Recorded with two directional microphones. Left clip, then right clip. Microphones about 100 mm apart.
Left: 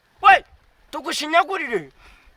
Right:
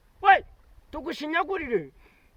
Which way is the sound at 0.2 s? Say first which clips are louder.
Left 6 dB; 45° left (ahead or behind).